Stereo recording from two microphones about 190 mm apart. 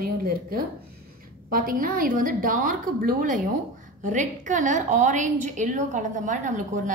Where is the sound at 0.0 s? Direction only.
50° right (ahead or behind).